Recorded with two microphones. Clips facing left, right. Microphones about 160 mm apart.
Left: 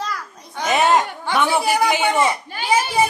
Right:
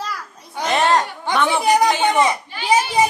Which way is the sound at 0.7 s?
10° left (ahead or behind).